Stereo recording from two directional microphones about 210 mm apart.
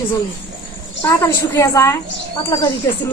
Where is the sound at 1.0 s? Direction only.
15° left (ahead or behind).